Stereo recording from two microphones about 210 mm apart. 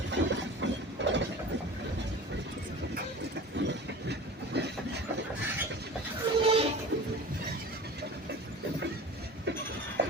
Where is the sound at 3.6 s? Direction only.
50° right (ahead or behind).